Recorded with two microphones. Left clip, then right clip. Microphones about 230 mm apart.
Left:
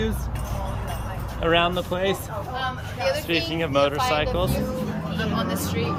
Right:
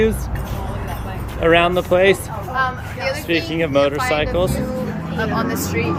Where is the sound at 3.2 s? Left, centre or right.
Centre.